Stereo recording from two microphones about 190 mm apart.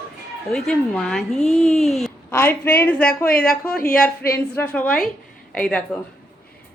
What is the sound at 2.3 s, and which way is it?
A woman's voice, 10° left (ahead or behind).